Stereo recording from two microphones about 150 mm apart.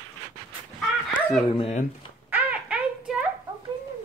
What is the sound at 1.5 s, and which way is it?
Speech, 40° left (ahead or behind).